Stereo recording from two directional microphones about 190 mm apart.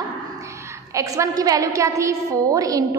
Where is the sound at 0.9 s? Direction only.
15° right (ahead or behind).